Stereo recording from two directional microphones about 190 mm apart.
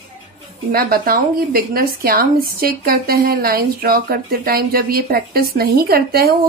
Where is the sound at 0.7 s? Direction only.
50° right (ahead or behind).